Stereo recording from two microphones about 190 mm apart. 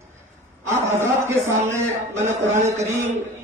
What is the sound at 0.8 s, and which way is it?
Speech, 15° right (ahead or behind).